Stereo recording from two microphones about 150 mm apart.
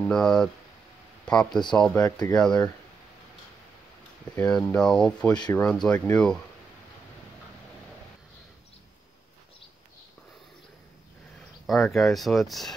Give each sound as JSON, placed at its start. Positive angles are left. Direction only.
{"t": 0.0, "sound": "speech", "side_deg": 5}
{"t": 2.0, "sound": "speech", "side_deg": 20}
{"t": 4.5, "sound": "speech", "side_deg": 5}
{"t": 11.6, "sound": "speech", "side_deg": 0}